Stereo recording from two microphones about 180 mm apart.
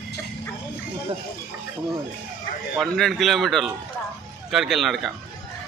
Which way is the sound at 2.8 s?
Centre (ahead or behind).